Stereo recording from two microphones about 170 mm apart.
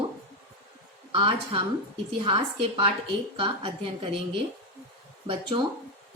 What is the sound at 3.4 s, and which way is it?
Speech, 30° right (ahead or behind).